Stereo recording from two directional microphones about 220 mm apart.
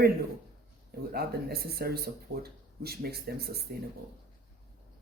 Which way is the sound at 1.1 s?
45° right (ahead or behind).